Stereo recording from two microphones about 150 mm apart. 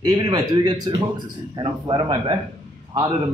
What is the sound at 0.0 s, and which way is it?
Speech, 30° right (ahead or behind).